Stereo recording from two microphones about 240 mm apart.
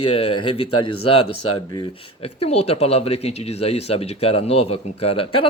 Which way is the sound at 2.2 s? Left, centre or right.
Left.